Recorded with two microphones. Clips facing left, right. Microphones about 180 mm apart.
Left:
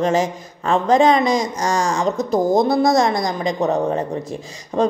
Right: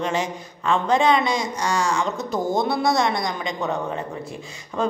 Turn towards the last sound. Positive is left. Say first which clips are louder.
# left 6 dB
turn(degrees=35)  # may be behind; listen again after turning